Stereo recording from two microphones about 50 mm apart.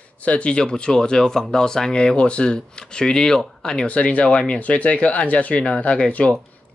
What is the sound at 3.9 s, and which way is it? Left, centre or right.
Speech, left.